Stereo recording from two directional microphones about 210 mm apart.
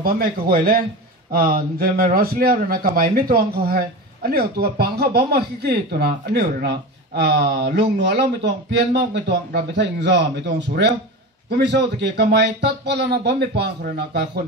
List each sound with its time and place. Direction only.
0.0 s a man's voice: 45° right (ahead or behind)
11.5 s a man's voice: 55° right (ahead or behind)